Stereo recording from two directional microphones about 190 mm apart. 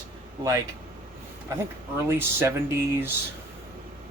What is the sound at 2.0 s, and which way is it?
Speech, 10° right (ahead or behind).